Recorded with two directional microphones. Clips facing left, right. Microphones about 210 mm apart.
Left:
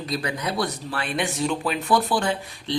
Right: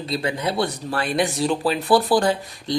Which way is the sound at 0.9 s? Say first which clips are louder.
Right 6 dB; 40° right (ahead or behind).